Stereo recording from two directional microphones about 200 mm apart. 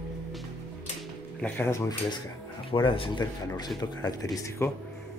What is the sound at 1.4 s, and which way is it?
Speech, 10° left (ahead or behind).